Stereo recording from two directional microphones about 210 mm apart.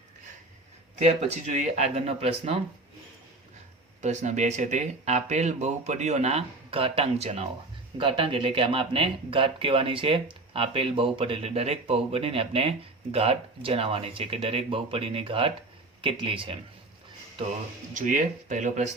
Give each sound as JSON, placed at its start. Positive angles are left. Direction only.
{"t": 0.9, "sound": "speech", "side_deg": -35}
{"t": 4.0, "sound": "speech", "side_deg": -35}
{"t": 17.9, "sound": "speech", "side_deg": -40}